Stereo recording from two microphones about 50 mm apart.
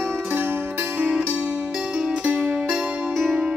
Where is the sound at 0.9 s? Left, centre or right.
Right.